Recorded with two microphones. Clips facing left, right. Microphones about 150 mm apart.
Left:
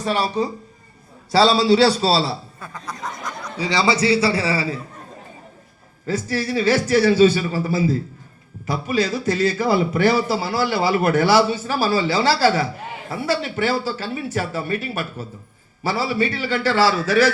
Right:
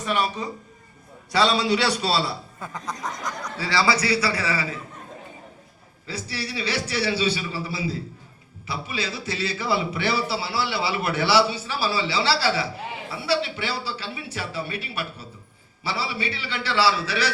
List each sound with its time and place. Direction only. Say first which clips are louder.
0.0 s a man's voice: left 5 dB; 35° left (ahead or behind)
2.6 s snicker: even; 20° right (ahead or behind)
3.6 s a man's voice: left 4 dB; 20° left (ahead or behind)
6.1 s a man's voice: left 9 dB; 45° left (ahead or behind)